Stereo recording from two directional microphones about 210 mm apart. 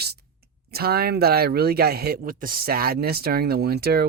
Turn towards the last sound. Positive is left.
turn(degrees=-50)  # may be behind; listen again after turning